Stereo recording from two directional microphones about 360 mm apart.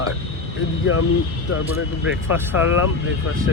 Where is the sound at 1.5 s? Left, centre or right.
Left.